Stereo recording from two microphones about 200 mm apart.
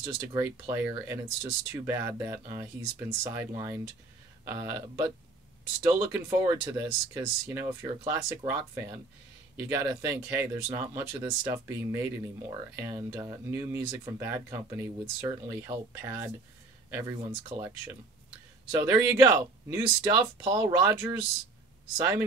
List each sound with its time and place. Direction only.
0.3 s speech: 15° right (ahead or behind)